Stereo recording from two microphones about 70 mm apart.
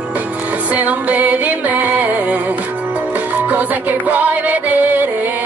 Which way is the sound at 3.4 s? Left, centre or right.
Right.